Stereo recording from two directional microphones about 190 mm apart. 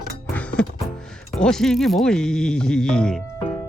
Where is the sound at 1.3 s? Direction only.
5° left (ahead or behind).